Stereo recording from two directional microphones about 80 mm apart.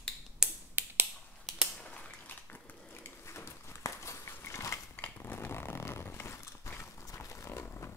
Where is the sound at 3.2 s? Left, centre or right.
Left.